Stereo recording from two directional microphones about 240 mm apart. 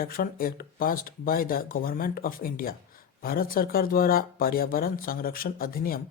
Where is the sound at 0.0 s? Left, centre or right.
Left.